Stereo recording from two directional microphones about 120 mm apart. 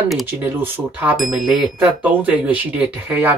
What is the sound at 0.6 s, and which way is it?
Speech, 15° right (ahead or behind).